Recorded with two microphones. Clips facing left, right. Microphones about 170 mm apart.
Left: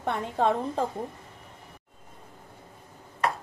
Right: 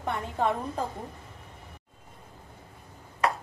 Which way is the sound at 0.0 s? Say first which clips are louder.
Left 2 dB; 30° left (ahead or behind).